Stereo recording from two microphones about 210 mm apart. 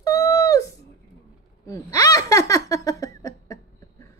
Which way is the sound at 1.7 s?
15° left (ahead or behind).